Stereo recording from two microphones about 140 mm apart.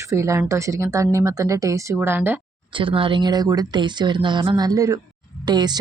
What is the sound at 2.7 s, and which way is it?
Speech, 40° right (ahead or behind).